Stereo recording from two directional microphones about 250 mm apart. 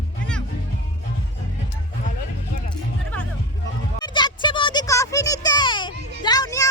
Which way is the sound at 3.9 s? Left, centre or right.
Centre.